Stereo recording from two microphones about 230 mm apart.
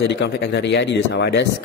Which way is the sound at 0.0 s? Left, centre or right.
Left.